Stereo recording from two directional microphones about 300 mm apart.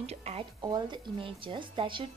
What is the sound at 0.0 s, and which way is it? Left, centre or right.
Speech, right.